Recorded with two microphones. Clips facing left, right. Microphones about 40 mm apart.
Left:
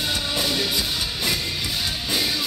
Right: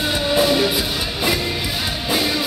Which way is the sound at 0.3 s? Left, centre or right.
Centre.